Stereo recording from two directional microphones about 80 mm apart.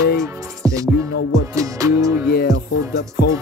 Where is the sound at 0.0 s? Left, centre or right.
Right.